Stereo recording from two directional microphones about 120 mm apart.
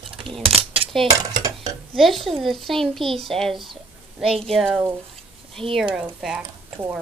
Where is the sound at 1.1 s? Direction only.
30° right (ahead or behind).